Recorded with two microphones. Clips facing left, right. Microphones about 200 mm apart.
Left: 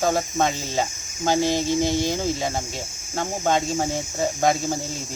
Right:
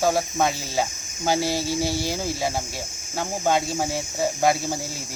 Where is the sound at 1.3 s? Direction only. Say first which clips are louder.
Left 5 dB; 20° left (ahead or behind).